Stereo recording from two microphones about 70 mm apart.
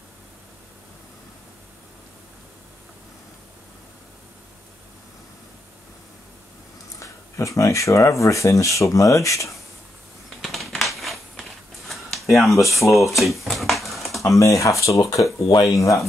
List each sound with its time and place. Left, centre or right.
7.0 s speech: left
10.4 s typewriter: centre
11.9 s a sound: centre
12.4 s speech: centre
12.8 s speech: left
13.1 s a sound: centre
14.2 s speech: left